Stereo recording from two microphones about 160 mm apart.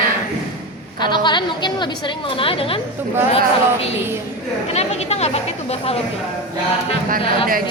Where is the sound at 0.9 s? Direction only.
30° left (ahead or behind).